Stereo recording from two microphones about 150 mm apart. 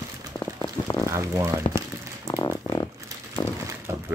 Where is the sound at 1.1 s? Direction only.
20° right (ahead or behind).